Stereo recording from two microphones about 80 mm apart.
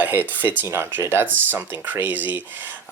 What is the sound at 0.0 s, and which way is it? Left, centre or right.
Speech, right.